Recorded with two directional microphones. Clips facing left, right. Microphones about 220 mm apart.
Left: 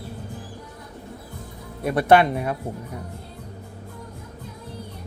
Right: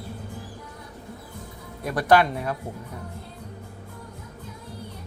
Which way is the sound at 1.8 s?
25° left (ahead or behind).